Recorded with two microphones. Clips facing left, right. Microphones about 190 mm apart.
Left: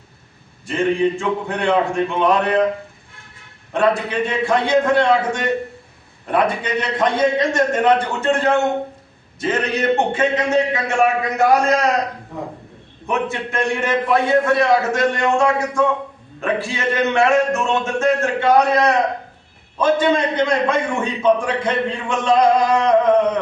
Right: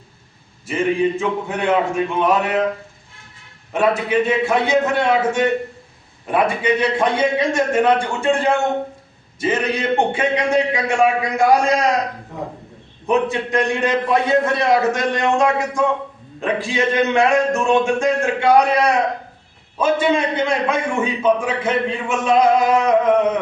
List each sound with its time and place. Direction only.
1.2 s speech: 5° right (ahead or behind)
3.7 s a man's voice: 5° right (ahead or behind)
13.1 s a man's voice: 15° right (ahead or behind)